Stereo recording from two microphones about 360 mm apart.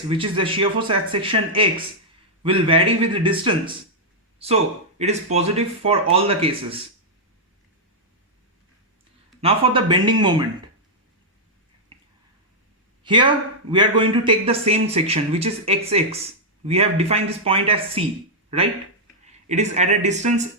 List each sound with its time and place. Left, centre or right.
0.1 s a man's voice: centre
9.4 s a man's voice: centre
13.1 s a man's voice: centre
19.5 s speech: centre